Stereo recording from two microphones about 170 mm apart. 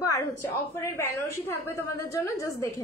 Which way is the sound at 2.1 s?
15° left (ahead or behind).